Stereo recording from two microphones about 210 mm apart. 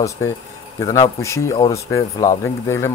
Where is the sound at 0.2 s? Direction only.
15° left (ahead or behind).